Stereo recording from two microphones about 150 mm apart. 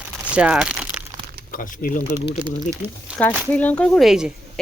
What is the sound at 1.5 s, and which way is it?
Speech, 65° left (ahead or behind).